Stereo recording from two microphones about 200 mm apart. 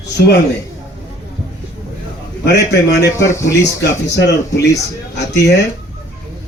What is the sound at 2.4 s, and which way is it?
Speech, 55° left (ahead or behind).